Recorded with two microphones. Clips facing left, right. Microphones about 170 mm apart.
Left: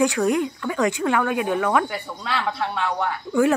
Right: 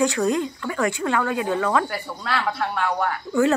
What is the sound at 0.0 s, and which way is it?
Speech, 15° left (ahead or behind).